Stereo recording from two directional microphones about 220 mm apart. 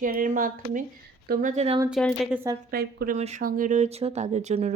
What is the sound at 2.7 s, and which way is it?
Speech, 45° right (ahead or behind).